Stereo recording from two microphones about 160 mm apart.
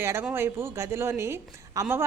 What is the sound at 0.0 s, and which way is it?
A woman's voice, 15° right (ahead or behind).